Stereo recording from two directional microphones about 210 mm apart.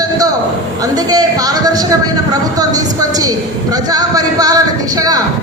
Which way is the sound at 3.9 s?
15° right (ahead or behind).